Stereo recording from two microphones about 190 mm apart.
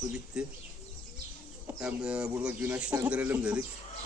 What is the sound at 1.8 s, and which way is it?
Speech, 5° right (ahead or behind).